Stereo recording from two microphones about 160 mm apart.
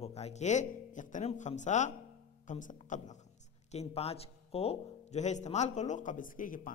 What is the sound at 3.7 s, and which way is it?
Speech, 40° left (ahead or behind).